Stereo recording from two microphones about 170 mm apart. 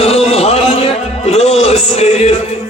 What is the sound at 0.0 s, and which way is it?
Music, 35° left (ahead or behind).